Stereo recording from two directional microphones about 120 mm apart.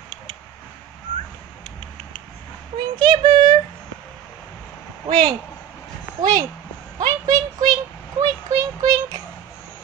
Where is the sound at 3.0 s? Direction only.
40° right (ahead or behind).